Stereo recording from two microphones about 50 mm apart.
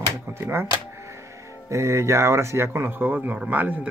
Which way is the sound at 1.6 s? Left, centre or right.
Right.